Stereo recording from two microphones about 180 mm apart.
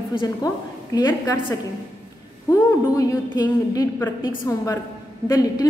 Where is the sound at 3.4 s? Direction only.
20° left (ahead or behind).